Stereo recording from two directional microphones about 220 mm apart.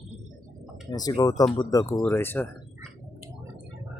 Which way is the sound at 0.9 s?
15° left (ahead or behind).